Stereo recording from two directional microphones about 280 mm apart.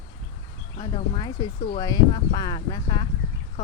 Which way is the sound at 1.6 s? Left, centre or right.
Centre.